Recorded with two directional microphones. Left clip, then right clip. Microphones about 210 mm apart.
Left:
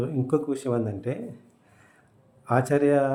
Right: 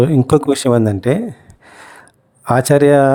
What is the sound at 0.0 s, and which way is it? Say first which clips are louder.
Speech: right 13 dB; 50° right (ahead or behind).